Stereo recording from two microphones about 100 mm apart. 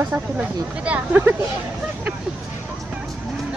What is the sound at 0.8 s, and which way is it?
Speech, 15° right (ahead or behind).